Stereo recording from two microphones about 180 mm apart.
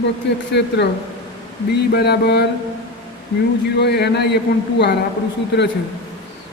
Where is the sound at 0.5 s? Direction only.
70° left (ahead or behind).